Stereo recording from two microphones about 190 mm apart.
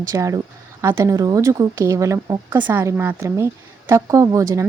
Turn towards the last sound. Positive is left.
turn(degrees=-15)  # may be behind; listen again after turning